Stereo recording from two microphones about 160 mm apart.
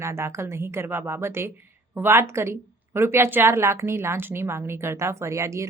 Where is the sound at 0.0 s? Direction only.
15° right (ahead or behind).